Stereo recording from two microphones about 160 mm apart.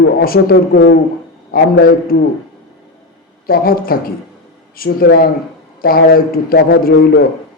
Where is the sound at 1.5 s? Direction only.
85° left.